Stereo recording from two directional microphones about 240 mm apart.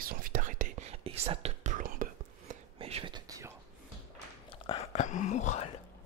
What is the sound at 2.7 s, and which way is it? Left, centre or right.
Whispering, right.